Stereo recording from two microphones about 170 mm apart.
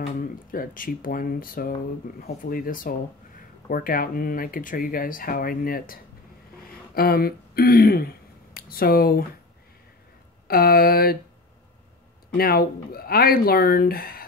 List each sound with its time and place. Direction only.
0.1 s speech: 55° left (ahead or behind)
10.5 s speech: 60° left (ahead or behind)
12.4 s speech: 60° left (ahead or behind)